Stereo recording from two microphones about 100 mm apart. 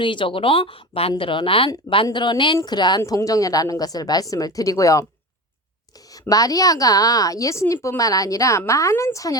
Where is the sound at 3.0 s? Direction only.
30° left (ahead or behind).